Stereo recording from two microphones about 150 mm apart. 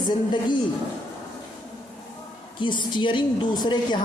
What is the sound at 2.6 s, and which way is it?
A woman's voice, 30° left (ahead or behind).